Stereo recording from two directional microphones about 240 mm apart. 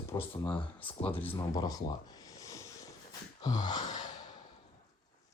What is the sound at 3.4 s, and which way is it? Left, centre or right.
Gasp, centre.